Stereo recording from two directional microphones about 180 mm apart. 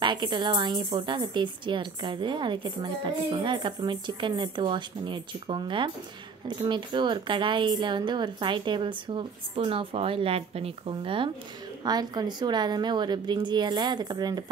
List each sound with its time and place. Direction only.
0.0 s a woman's voice: 25° right (ahead or behind)